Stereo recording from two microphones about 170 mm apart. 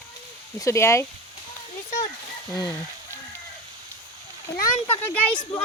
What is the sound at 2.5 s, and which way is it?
Speech, 20° left (ahead or behind).